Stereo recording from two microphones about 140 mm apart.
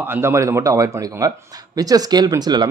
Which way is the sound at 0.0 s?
15° right (ahead or behind).